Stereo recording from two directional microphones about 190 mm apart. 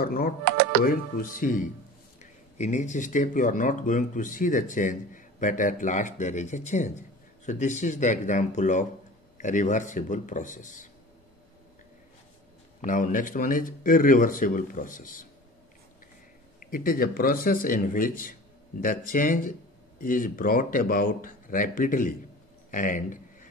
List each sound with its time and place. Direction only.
0.0 s speech: 50° left (ahead or behind)
12.8 s speech: 45° left (ahead or behind)
16.5 s speech: 50° left (ahead or behind)